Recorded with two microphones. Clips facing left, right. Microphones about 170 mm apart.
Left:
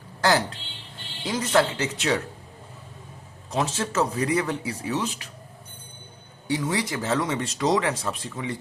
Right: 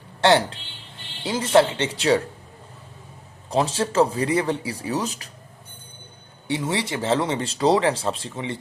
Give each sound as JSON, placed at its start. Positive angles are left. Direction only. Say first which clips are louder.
{"t": 0.2, "sound": "a woman's voice", "louder": "right 4 dB", "side_deg": -25}
{"t": 3.5, "sound": "speech", "louder": "right 4 dB", "side_deg": -35}
{"t": 6.5, "sound": "speech", "louder": "right 1 dB", "side_deg": -25}